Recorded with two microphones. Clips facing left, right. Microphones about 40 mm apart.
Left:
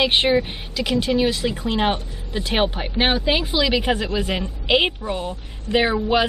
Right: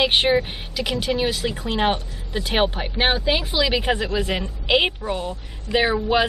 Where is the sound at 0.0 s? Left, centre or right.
Centre.